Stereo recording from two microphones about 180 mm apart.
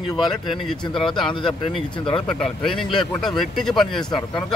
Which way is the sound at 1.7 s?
5° left (ahead or behind).